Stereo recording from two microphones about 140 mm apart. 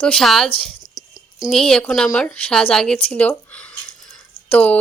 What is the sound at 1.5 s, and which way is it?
A woman's voice, 5° left (ahead or behind).